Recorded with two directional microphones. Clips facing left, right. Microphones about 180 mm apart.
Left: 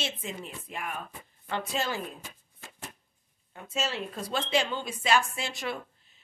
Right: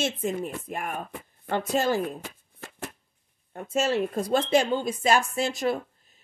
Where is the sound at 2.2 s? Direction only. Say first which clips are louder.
Right 7 dB; 65° right (ahead or behind).